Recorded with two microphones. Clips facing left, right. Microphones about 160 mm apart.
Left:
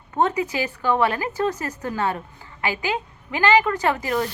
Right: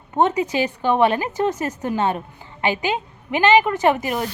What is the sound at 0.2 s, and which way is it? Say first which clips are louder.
A woman's voice: right 3 dB; 20° right (ahead or behind).